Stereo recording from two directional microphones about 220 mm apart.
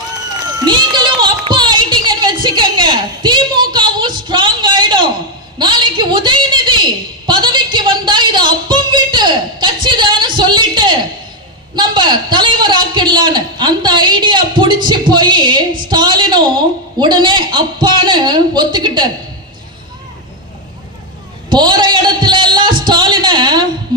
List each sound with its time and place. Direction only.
0.6 s music: 20° right (ahead or behind)
5.5 s a sound: 20° right (ahead or behind)
17.0 s a man's voice: 20° right (ahead or behind)
21.5 s music: 20° right (ahead or behind)